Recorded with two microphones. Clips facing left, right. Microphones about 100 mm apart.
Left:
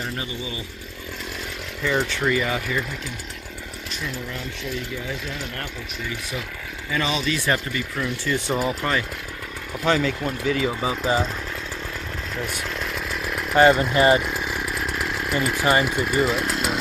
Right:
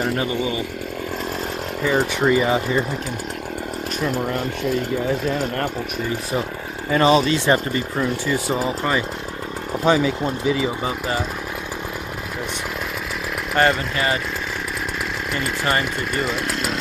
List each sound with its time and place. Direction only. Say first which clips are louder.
2.2 s speech: right 5 dB; 25° right (ahead or behind)
4.0 s speech: right 9 dB; 50° right (ahead or behind)
7.3 s speech: right 5 dB; 30° right (ahead or behind)
8.3 s speech: right 2 dB; 5° right (ahead or behind)
9.8 s speech: right 3 dB; 15° right (ahead or behind)
13.6 s speech: left 3 dB; 10° left (ahead or behind)
13.9 s speech: left 5 dB; 25° left (ahead or behind)
15.3 s speech: left 2 dB; 10° left (ahead or behind)